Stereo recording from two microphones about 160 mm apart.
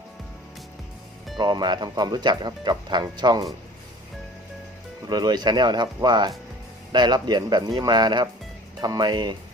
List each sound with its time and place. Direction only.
1.4 s speech: 25° right (ahead or behind)
5.0 s speech: 25° right (ahead or behind)